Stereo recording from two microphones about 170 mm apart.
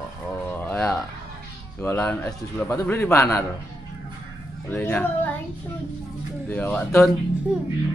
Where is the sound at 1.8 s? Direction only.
10° left (ahead or behind).